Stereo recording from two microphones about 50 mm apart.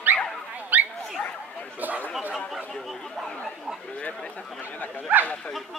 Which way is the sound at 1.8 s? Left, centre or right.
Right.